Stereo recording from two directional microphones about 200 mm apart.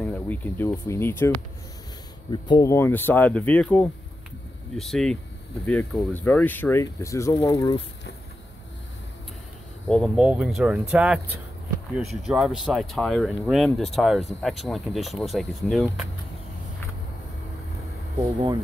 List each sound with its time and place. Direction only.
0.0 s speech: 10° left (ahead or behind)
2.3 s speech: 20° left (ahead or behind)
9.8 s speech: 5° left (ahead or behind)
18.2 s speech: 20° right (ahead or behind)